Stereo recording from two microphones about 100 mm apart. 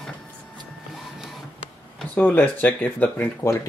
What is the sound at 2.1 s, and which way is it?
Speech, 15° left (ahead or behind).